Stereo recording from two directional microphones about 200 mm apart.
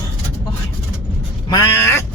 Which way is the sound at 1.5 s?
15° left (ahead or behind).